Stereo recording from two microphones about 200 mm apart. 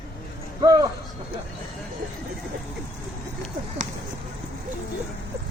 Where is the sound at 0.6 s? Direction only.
20° right (ahead or behind).